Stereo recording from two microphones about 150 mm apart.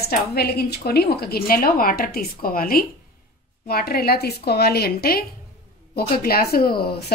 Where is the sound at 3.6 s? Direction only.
90° left.